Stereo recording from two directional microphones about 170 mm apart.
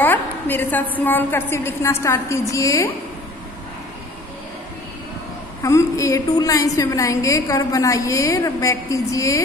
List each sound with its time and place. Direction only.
0.0 s a woman's voice: 10° left (ahead or behind)
5.6 s a woman's voice: 20° left (ahead or behind)